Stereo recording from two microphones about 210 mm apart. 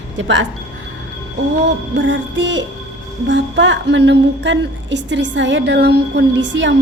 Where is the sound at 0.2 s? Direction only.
60° right (ahead or behind).